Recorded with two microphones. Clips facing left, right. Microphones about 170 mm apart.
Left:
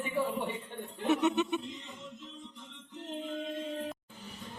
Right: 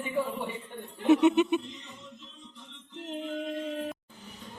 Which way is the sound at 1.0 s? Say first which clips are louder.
Right 7 dB; 15° right (ahead or behind).